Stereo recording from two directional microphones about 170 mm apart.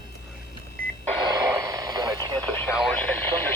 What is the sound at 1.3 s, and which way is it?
Radio, 25° right (ahead or behind).